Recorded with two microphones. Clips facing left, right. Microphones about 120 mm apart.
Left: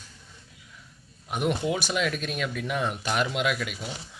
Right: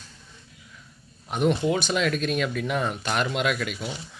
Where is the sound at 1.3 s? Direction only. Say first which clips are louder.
Right 4 dB; 10° left (ahead or behind).